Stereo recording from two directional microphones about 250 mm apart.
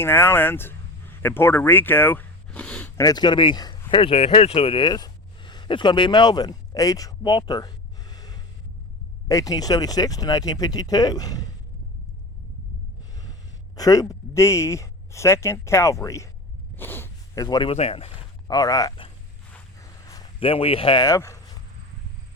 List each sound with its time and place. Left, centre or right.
0.0 s speech: centre
3.0 s speech: centre
13.7 s speech: centre
19.5 s a sound: centre